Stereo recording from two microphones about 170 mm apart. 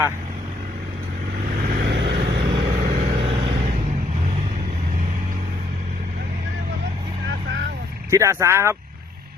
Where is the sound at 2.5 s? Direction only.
35° right (ahead or behind).